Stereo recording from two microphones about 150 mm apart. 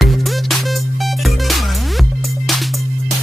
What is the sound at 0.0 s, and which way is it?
Music, centre (ahead or behind).